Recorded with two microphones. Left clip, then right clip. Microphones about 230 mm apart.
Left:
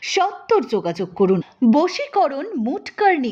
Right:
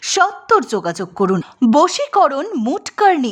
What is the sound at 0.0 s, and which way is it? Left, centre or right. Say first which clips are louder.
A woman's voice: right 4 dB; right.